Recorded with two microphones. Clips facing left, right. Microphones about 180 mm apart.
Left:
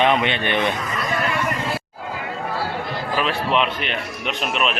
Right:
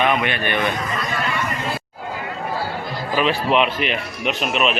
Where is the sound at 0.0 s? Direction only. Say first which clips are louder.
Left 1 dB; 25° left (ahead or behind).